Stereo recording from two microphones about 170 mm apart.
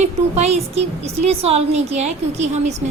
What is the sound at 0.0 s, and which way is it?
A woman's voice, 40° right (ahead or behind).